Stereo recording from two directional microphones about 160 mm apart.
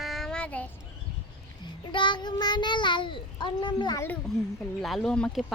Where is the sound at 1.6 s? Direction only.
30° left (ahead or behind).